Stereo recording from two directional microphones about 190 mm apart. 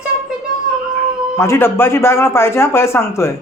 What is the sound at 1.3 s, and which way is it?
Speech, 15° left (ahead or behind).